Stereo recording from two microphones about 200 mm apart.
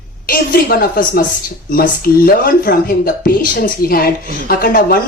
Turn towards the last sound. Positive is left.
turn(degrees=45)  # may be behind; listen again after turning